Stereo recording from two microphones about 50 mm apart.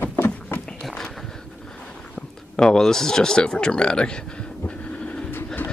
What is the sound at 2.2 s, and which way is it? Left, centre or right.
Speech, centre.